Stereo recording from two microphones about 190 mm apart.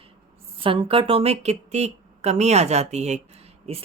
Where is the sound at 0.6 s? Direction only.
30° right (ahead or behind).